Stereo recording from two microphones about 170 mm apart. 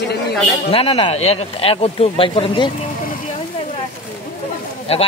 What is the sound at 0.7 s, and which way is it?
Speech, 35° left (ahead or behind).